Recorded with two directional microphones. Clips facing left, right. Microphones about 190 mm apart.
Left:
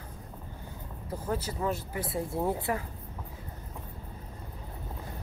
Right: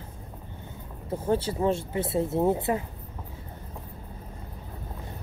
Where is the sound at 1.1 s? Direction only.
25° right (ahead or behind).